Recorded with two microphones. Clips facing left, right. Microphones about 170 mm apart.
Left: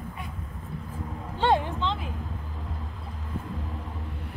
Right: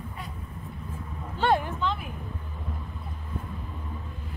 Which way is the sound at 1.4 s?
20° left (ahead or behind).